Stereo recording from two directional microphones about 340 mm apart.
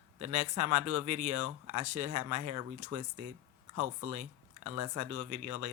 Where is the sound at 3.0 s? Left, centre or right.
Right.